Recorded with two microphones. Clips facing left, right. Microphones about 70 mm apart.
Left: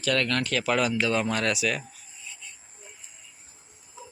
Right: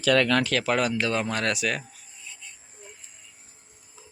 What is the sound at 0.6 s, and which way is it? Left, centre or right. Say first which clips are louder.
Speech: even; right.